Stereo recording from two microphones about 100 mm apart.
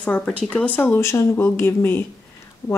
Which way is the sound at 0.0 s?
15° left (ahead or behind).